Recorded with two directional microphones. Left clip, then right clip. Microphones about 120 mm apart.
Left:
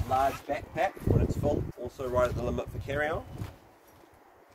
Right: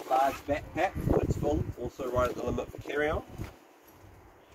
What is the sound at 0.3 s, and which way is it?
Speech, 30° left (ahead or behind).